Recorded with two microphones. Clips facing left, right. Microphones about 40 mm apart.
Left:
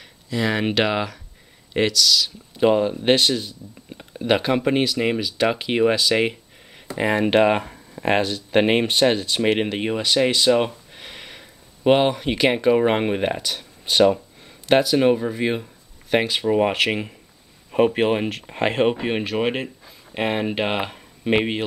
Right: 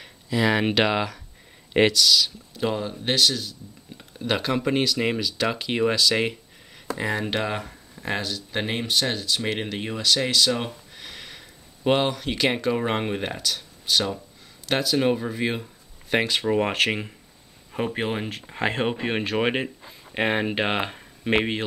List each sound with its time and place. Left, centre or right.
0.0 s speech: centre
1.7 s speech: centre
2.5 s speech: left
7.0 s speech: left
13.8 s speech: left
14.7 s speech: centre
17.6 s speech: left
18.8 s speech: centre
19.0 s speech: centre